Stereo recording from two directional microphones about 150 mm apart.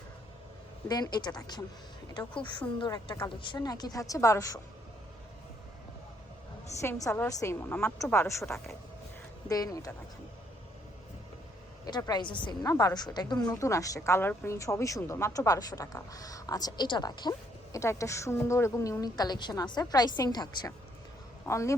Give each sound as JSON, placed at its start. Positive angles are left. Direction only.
{"t": 0.9, "sound": "a woman's voice", "side_deg": 25}
{"t": 6.8, "sound": "a woman's voice", "side_deg": 20}
{"t": 8.4, "sound": "speech", "side_deg": 0}
{"t": 9.5, "sound": "a woman's voice", "side_deg": 25}
{"t": 11.9, "sound": "a woman's voice", "side_deg": 25}